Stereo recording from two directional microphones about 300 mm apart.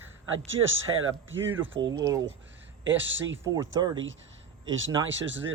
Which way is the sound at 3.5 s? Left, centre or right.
Centre.